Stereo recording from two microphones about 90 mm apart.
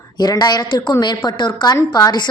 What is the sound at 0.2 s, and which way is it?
A woman's voice, 50° left (ahead or behind).